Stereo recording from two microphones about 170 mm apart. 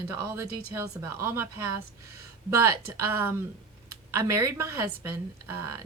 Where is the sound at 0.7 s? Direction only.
15° right (ahead or behind).